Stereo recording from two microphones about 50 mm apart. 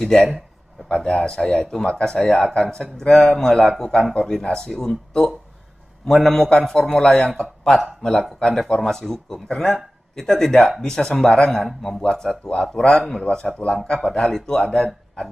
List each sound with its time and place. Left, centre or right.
0.0 s a man's voice: centre
11.6 s a man's voice: centre
12.0 s speech: centre